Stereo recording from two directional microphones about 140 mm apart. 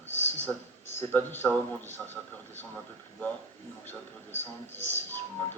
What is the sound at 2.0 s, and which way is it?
Speech, 5° right (ahead or behind).